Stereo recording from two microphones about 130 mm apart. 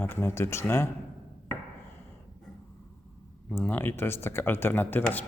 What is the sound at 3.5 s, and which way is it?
Speech, 15° left (ahead or behind).